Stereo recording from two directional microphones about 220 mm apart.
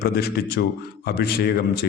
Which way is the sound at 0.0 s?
45° left (ahead or behind).